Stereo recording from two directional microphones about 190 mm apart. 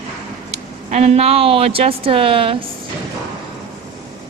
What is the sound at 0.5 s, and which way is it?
A woman's voice, 35° right (ahead or behind).